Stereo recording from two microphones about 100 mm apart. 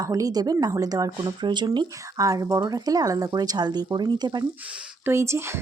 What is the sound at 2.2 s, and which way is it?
Speech, 35° right (ahead or behind).